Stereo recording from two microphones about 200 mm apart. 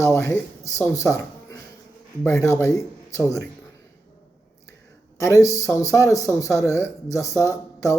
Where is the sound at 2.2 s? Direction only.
15° left (ahead or behind).